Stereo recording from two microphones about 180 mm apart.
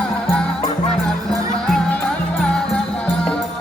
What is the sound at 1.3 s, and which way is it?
Music, 20° right (ahead or behind).